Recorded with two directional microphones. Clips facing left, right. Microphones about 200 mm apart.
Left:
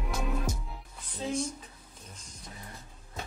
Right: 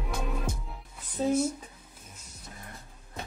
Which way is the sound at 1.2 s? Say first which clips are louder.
Right 7 dB; 45° right (ahead or behind).